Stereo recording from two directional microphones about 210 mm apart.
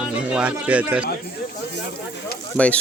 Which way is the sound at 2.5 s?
5° left (ahead or behind).